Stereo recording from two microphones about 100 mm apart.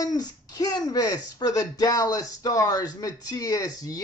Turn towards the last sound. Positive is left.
turn(degrees=35)  # may be behind; listen again after turning